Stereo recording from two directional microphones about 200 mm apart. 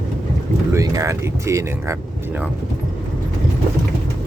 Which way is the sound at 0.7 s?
15° right (ahead or behind).